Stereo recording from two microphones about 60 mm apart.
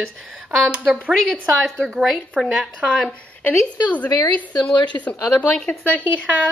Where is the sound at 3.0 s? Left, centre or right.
Left.